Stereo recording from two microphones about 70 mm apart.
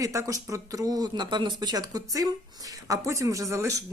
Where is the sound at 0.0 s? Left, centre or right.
Right.